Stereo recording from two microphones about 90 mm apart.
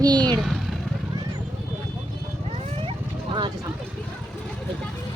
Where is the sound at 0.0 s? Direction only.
50° right (ahead or behind).